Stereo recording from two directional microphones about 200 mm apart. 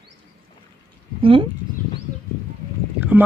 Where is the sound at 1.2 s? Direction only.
25° right (ahead or behind).